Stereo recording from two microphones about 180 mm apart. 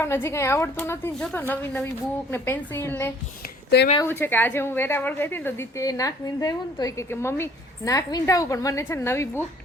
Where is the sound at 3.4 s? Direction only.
70° left (ahead or behind).